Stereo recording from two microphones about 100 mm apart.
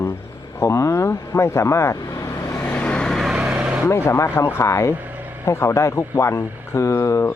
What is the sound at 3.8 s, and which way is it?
Speech, 25° left (ahead or behind).